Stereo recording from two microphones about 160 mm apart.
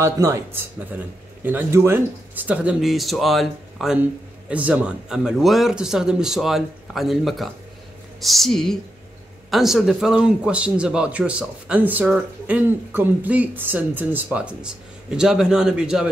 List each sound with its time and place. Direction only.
0.0 s a man's voice: 15° right (ahead or behind)